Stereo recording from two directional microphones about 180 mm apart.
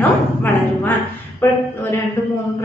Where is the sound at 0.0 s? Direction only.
10° left (ahead or behind).